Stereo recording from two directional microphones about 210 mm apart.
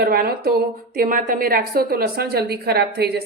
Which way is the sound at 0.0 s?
45° right (ahead or behind).